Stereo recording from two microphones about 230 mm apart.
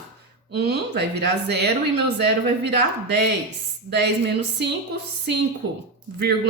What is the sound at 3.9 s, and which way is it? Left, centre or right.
Speech, right.